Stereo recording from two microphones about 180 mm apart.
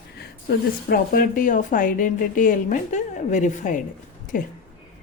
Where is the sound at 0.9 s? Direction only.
50° left (ahead or behind).